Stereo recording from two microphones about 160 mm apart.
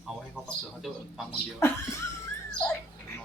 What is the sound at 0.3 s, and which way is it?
Speech, centre (ahead or behind).